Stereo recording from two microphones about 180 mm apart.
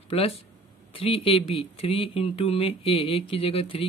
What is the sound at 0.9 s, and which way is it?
Speech, 30° left (ahead or behind).